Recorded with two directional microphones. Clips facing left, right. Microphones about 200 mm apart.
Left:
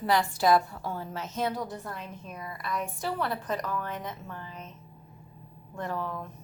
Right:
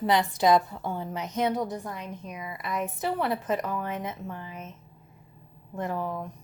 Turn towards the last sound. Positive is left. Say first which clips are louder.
# right 3 dB
turn(degrees=-20)  # may be behind; listen again after turning